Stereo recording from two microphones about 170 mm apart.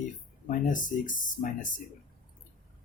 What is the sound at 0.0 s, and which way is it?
Speech, 50° left (ahead or behind).